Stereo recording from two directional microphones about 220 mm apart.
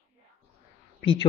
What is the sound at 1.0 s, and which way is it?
Speech, 20° left (ahead or behind).